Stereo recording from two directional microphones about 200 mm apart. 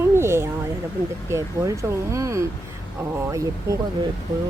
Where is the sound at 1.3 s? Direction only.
15° right (ahead or behind).